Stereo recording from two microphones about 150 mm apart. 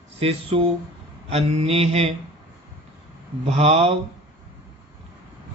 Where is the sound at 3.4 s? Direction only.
40° right (ahead or behind).